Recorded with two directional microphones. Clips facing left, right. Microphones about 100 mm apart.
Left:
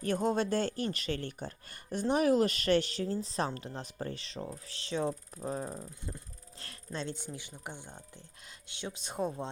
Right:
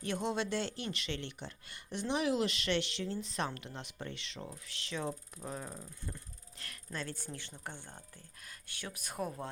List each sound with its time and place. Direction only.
0.0 s speech: 45° left (ahead or behind)
5.7 s speech: 20° left (ahead or behind)